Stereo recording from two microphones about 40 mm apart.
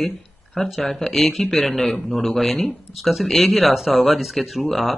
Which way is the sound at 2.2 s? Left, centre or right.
Centre.